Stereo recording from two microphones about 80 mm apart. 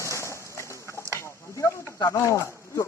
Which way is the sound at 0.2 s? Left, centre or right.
Left.